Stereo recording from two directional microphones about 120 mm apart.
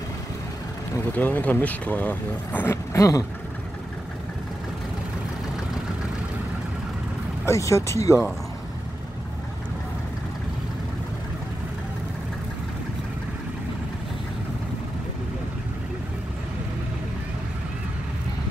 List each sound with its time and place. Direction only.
1.1 s speech: 15° left (ahead or behind)
7.4 s speech: 25° left (ahead or behind)